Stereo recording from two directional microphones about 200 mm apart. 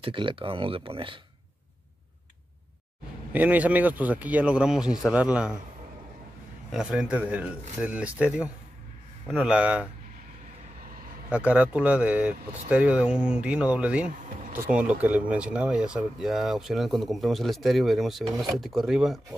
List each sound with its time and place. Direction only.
0.0 s speech: 25° right (ahead or behind)
3.3 s speech: 5° right (ahead or behind)
6.7 s speech: 5° right (ahead or behind)
11.2 s speech: 5° right (ahead or behind)